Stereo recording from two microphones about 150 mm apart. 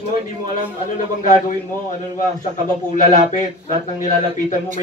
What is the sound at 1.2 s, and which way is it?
Speech, 60° left (ahead or behind).